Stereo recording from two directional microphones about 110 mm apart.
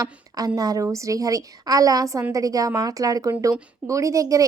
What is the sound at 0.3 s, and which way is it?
A woman's voice, 35° right (ahead or behind).